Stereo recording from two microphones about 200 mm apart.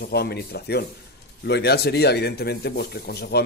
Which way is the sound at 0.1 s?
55° left (ahead or behind).